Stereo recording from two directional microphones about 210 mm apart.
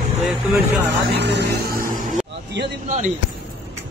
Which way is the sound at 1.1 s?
55° right (ahead or behind).